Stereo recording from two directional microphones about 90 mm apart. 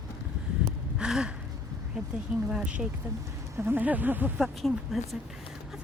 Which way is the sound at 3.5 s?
25° right (ahead or behind).